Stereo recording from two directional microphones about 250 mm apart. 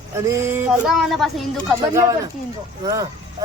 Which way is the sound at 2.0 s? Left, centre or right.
Centre.